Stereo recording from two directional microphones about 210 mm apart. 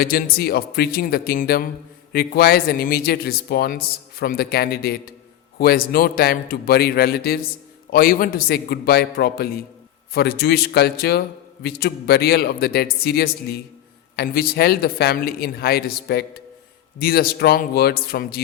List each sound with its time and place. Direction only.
0.0 s a man's voice: 45° left (ahead or behind)